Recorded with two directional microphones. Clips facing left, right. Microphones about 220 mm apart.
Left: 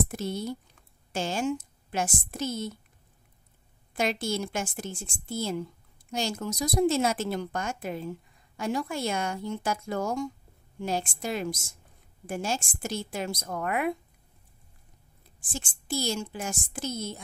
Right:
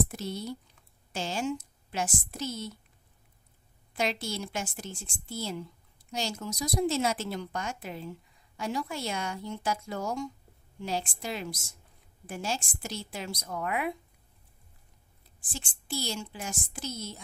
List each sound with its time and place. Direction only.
0.1 s a woman's voice: 50° left (ahead or behind)
3.9 s a woman's voice: 50° left (ahead or behind)
15.5 s a woman's voice: 45° left (ahead or behind)